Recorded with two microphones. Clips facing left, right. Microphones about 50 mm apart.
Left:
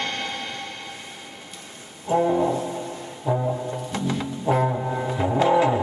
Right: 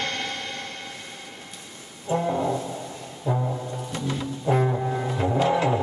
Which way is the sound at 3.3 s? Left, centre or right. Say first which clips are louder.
Left 3 dB; left.